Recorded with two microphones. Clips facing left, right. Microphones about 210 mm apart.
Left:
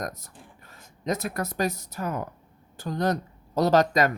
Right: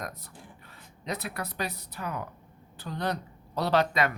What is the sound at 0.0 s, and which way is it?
Speech, 45° left (ahead or behind).